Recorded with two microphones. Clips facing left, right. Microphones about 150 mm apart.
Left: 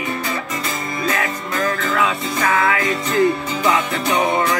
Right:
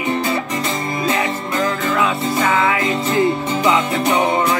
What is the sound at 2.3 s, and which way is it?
Music, centre (ahead or behind).